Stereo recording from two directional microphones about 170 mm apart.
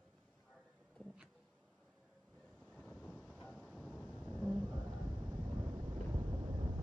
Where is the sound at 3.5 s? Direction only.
5° right (ahead or behind).